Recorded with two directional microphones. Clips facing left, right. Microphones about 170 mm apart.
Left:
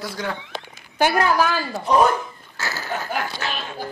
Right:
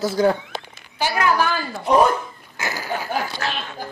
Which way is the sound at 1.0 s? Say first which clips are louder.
Left 5 dB; 55° left (ahead or behind).